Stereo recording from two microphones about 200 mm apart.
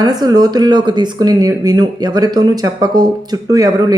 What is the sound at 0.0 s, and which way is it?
Speech, 20° right (ahead or behind).